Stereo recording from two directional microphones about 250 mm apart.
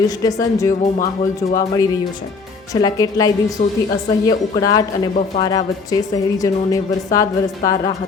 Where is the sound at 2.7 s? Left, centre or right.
Centre.